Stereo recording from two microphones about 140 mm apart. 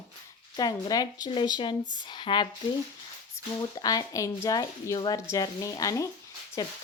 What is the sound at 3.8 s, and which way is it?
A woman's voice, 25° left (ahead or behind).